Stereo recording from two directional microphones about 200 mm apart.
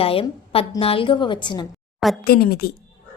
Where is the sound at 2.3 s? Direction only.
50° left (ahead or behind).